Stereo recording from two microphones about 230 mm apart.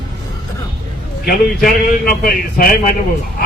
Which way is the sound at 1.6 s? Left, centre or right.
Left.